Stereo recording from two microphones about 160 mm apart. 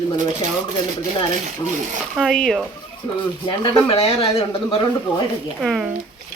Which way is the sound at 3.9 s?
35° left (ahead or behind).